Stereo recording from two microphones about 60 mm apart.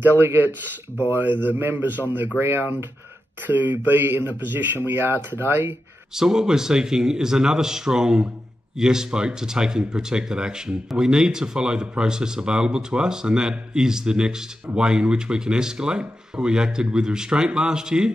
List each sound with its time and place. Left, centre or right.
0.0 s a man's voice: right
6.1 s speech: centre